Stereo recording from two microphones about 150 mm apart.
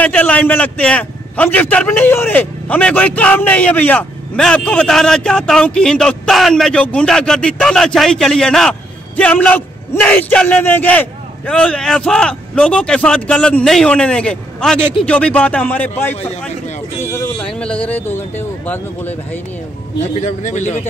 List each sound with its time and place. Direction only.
0.0 s a man's voice: 10° left (ahead or behind)
16.2 s a man's voice: 50° left (ahead or behind)
17.0 s a man's voice: 15° left (ahead or behind)
20.0 s a man's voice: 50° left (ahead or behind)